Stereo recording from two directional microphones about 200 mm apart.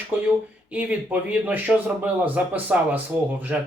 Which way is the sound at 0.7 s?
5° right (ahead or behind).